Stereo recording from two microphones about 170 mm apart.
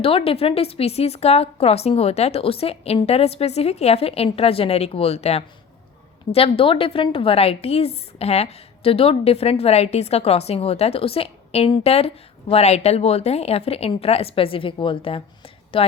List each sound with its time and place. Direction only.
0.0 s a woman's voice: 35° left (ahead or behind)